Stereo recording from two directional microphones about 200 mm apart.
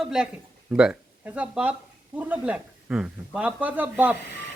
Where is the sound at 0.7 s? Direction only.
5° right (ahead or behind).